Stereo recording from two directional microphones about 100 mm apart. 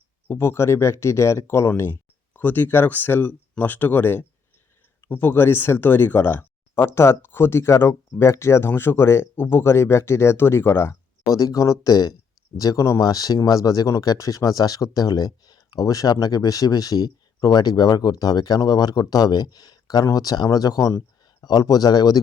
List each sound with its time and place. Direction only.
0.3 s speech: 25° left (ahead or behind)
11.3 s speech: 35° left (ahead or behind)